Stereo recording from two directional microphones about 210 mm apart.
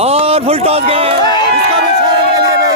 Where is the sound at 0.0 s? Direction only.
30° right (ahead or behind).